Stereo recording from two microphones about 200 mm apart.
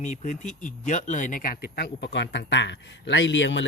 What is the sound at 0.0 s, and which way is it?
Speech, 35° left (ahead or behind).